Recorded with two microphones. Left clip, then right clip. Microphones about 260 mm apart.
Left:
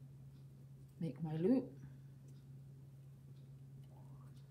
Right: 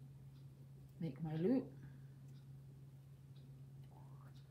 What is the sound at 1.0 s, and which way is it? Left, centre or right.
Speech, centre.